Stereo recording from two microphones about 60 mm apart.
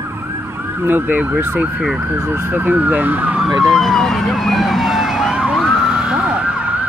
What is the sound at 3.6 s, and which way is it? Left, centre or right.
Speech, centre.